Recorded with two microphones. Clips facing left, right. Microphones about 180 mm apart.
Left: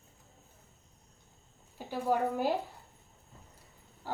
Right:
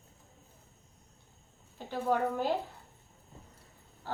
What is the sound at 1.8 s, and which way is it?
Speech, 10° left (ahead or behind).